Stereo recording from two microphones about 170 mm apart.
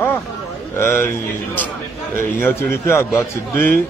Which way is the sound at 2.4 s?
15° left (ahead or behind).